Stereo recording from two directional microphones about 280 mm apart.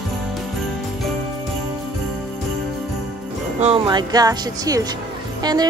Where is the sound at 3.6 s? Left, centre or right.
Centre.